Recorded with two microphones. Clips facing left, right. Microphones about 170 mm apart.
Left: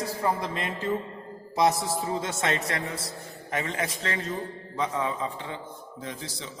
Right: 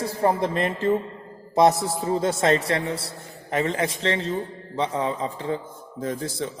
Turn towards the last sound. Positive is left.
turn(degrees=-50)  # may be behind; listen again after turning